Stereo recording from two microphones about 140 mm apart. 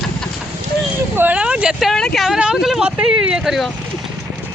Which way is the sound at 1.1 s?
10° right (ahead or behind).